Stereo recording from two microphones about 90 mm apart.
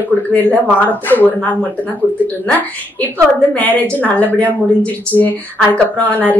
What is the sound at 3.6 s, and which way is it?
A woman's voice, 20° left (ahead or behind).